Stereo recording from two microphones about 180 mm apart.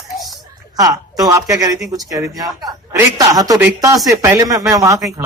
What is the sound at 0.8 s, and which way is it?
A man's voice, 20° right (ahead or behind).